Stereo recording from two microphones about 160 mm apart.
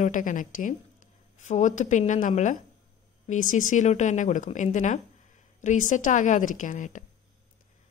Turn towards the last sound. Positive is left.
turn(degrees=55)  # may be behind; listen again after turning